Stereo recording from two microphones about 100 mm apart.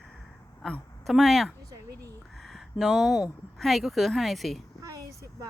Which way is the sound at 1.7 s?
35° right (ahead or behind).